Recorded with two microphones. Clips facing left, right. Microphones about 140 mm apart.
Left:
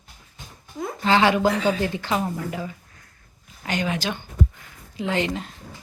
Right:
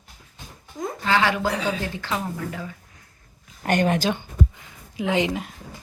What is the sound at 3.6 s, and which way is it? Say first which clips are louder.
Speech: right 5 dB; 55° right (ahead or behind).